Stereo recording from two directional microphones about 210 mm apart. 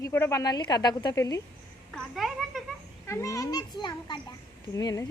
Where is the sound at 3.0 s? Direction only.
15° left (ahead or behind).